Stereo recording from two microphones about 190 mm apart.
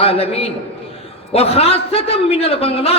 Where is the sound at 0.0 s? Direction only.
30° left (ahead or behind).